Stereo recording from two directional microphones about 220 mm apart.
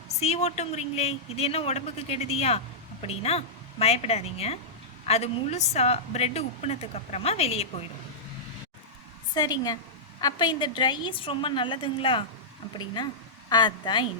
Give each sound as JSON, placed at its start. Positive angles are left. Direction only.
{"t": 0.1, "sound": "a woman's voice", "side_deg": 30}
{"t": 9.3, "sound": "a woman's voice", "side_deg": 20}